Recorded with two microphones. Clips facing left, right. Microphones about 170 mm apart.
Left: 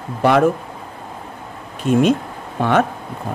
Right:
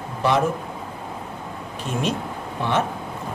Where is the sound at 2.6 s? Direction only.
60° left (ahead or behind).